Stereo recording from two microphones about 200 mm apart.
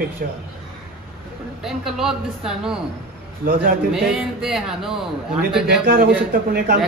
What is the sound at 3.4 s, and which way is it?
Speech, 45° right (ahead or behind).